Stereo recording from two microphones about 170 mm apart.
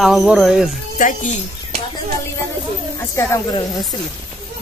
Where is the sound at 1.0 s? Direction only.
50° left (ahead or behind).